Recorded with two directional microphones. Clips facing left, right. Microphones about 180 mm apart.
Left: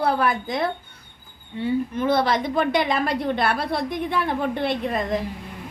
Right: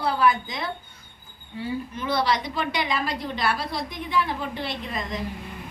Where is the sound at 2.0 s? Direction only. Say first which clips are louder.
Left 2 dB; 50° left (ahead or behind).